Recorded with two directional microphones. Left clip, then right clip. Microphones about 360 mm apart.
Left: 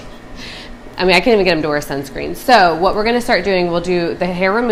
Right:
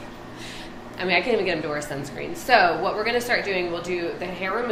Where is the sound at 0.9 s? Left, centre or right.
Left.